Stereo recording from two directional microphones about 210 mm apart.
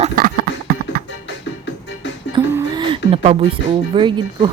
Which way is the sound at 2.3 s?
25° right (ahead or behind).